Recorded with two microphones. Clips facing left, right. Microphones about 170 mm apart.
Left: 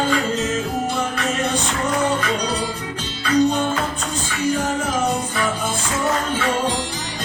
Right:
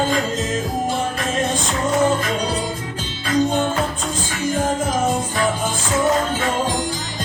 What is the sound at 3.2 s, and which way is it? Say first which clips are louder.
Music: left 1 dB; 50° right (ahead or behind).